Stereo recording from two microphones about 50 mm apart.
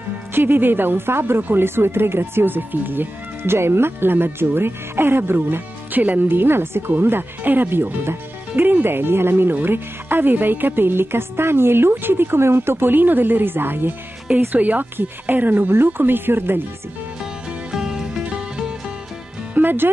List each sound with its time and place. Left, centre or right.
0.3 s speech: right
8.5 s speech: right
14.5 s speech: right
17.6 s music: centre
19.5 s speech: right